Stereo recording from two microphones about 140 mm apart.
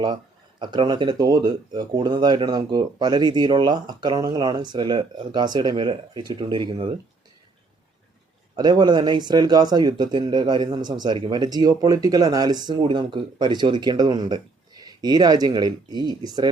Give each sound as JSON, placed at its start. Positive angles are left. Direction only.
{"t": 0.6, "sound": "speech", "side_deg": -35}
{"t": 8.5, "sound": "speech", "side_deg": -30}